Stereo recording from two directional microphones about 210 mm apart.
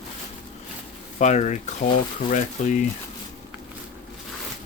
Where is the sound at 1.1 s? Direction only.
35° left (ahead or behind).